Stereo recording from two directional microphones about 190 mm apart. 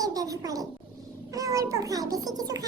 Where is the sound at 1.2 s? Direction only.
20° right (ahead or behind).